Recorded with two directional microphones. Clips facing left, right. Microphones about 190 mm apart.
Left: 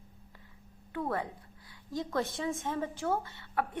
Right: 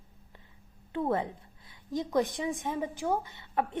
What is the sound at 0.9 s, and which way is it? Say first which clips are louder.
A woman's voice: right 4 dB; 25° right (ahead or behind).